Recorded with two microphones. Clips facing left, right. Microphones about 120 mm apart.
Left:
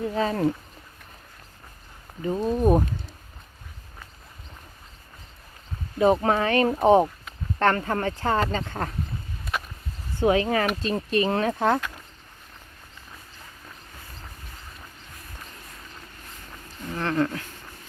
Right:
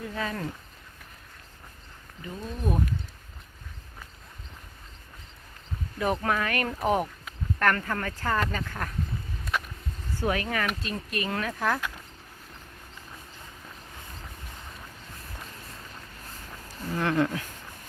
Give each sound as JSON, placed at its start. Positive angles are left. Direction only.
{"t": 0.0, "sound": "speech", "side_deg": 30}
{"t": 2.2, "sound": "speech", "side_deg": 40}
{"t": 6.0, "sound": "speech", "side_deg": 25}
{"t": 9.4, "sound": "a sound", "side_deg": 5}
{"t": 10.2, "sound": "speech", "side_deg": 20}
{"t": 17.0, "sound": "speech", "side_deg": -10}